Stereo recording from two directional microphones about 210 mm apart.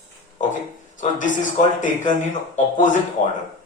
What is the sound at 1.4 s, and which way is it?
A man's voice, 35° left (ahead or behind).